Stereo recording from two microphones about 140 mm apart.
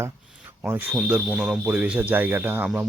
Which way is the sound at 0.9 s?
5° right (ahead or behind).